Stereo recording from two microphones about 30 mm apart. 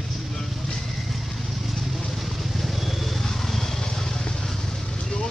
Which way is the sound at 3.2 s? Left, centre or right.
Centre.